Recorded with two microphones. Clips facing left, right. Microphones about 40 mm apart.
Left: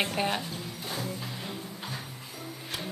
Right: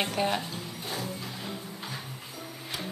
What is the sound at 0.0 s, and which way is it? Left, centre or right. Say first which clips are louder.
Speech: right 1 dB; centre.